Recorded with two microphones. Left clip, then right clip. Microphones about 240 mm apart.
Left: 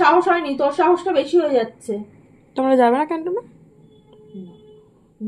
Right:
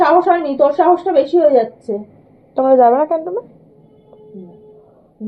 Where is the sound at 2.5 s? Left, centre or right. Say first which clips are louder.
Right 5 dB; left.